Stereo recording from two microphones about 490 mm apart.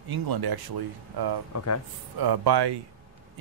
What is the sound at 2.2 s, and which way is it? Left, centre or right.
Speech, right.